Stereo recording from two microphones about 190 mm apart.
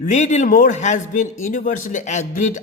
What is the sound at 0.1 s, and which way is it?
A man's voice, 40° left (ahead or behind).